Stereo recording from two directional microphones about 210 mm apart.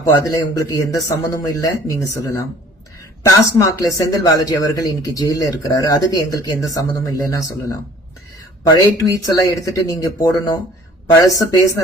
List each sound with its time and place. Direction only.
0.3 s speech: 15° left (ahead or behind)
3.2 s speech: 15° left (ahead or behind)